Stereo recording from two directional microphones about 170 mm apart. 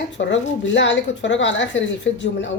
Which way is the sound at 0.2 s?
90° left.